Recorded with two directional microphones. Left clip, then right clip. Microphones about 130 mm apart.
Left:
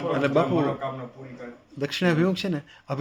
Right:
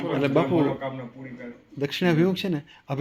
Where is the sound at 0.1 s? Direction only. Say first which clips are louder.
Even; 15° left (ahead or behind).